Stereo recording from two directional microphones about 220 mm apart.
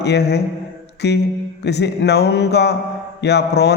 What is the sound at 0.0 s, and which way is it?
A man's voice, 50° left (ahead or behind).